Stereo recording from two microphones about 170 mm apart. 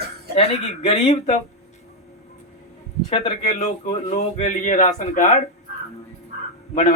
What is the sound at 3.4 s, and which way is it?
A man's voice, 40° left (ahead or behind).